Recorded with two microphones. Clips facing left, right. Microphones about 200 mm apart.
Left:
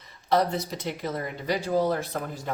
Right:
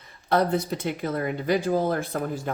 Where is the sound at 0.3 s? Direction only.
55° right (ahead or behind).